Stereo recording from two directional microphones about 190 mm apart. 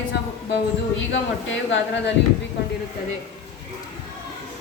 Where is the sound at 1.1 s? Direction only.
75° left (ahead or behind).